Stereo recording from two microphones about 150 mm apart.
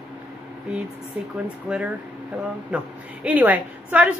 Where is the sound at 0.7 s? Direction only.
5° right (ahead or behind).